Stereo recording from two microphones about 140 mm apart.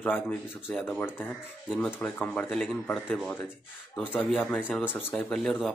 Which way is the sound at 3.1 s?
15° left (ahead or behind).